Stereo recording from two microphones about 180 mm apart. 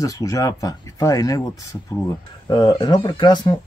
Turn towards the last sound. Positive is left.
turn(degrees=25)  # may be behind; listen again after turning